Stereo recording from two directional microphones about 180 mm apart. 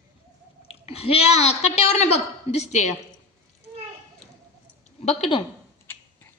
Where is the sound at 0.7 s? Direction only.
35° left (ahead or behind).